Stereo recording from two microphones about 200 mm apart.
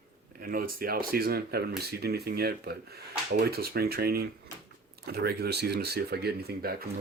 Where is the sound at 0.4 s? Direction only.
45° right (ahead or behind).